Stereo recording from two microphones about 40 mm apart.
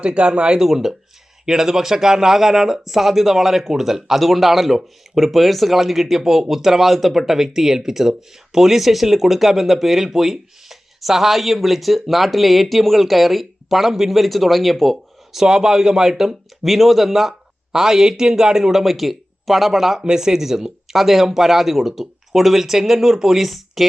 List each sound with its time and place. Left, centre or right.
0.0 s speech: right
0.6 s speech: centre
15.3 s speech: centre
16.6 s speech: centre